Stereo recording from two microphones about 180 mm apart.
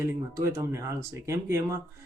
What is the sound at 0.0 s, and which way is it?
Speech, 15° right (ahead or behind).